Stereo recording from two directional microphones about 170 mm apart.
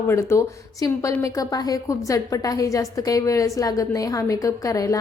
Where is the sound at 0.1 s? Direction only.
15° left (ahead or behind).